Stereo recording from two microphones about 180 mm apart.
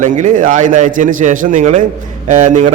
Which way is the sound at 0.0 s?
45° right (ahead or behind).